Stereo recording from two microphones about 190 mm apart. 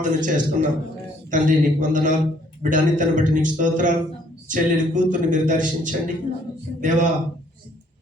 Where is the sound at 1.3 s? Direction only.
40° right (ahead or behind).